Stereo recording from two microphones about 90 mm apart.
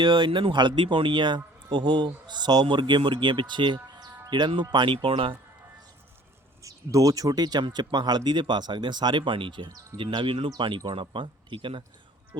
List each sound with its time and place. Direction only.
0.0 s speech: 65° right (ahead or behind)
6.6 s speech: 40° right (ahead or behind); by 10.5 s 75° right (ahead or behind)
10.6 s speech: 60° right (ahead or behind)